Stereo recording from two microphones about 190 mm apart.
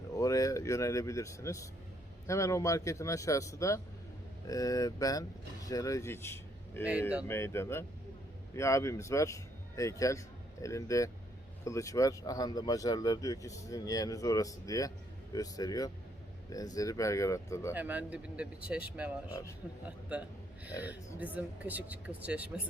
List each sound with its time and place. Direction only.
0.2 s a man's voice: 15° left (ahead or behind)
17.7 s speech: 10° right (ahead or behind)
21.3 s speech: 10° right (ahead or behind)